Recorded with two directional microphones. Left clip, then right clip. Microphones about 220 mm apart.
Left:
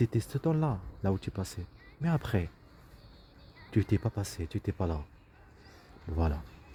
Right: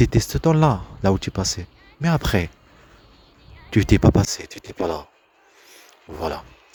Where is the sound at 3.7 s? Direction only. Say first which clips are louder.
Right 15 dB; 30° right (ahead or behind).